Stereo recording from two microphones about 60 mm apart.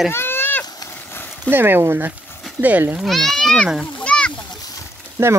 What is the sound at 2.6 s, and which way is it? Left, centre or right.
Speech, right.